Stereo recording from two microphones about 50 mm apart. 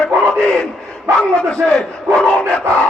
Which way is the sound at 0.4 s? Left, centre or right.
Centre.